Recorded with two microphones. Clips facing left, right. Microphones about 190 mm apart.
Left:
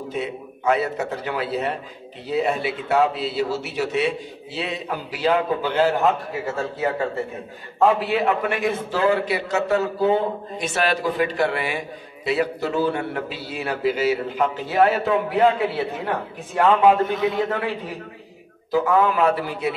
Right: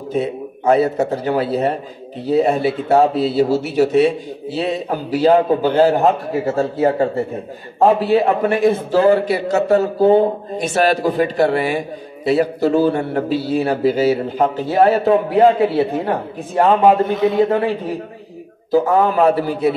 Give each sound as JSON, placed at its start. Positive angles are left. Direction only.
{"t": 0.1, "sound": "a man's voice", "side_deg": -40}